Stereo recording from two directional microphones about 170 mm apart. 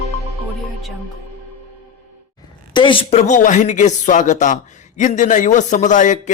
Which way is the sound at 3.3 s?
45° left (ahead or behind).